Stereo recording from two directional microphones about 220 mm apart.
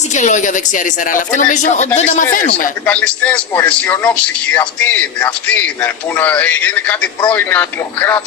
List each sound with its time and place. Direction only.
0.1 s a woman's voice: 35° left (ahead or behind)
2.8 s a man's voice: 5° left (ahead or behind)